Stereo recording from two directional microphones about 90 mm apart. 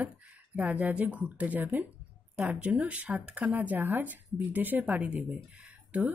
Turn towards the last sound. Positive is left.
turn(degrees=-15)  # may be behind; listen again after turning